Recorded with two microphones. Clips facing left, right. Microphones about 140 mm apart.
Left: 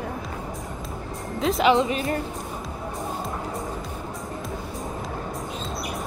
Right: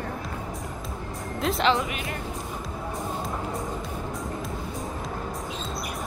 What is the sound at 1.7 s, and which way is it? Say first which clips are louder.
Speech: left 6 dB; 25° left (ahead or behind).